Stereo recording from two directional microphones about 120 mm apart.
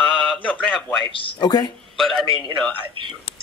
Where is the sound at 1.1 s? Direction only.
45° left (ahead or behind).